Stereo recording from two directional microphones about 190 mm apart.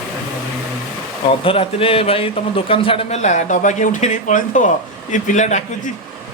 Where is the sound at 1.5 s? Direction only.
30° left (ahead or behind).